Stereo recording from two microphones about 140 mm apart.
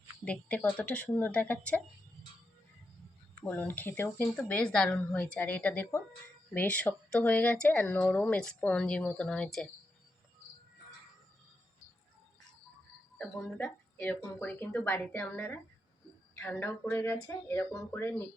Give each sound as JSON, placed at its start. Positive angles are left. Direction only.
{"t": 0.3, "sound": "speech", "side_deg": 10}
{"t": 3.4, "sound": "speech", "side_deg": 10}
{"t": 13.1, "sound": "speech", "side_deg": 10}